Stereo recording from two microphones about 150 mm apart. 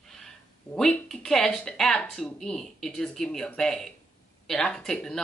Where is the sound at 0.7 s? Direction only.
5° left (ahead or behind).